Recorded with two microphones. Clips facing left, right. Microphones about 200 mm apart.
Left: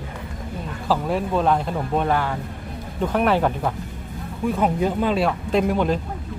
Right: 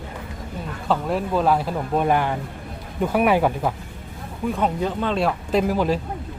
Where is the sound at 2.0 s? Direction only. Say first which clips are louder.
Right 2 dB; 15° right (ahead or behind).